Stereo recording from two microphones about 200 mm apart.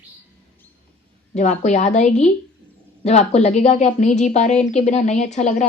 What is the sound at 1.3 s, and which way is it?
A woman's voice, 35° left (ahead or behind).